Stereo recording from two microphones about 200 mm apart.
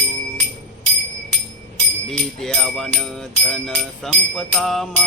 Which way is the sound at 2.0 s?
5° left (ahead or behind).